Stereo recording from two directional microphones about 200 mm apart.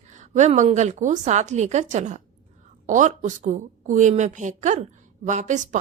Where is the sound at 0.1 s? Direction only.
35° right (ahead or behind).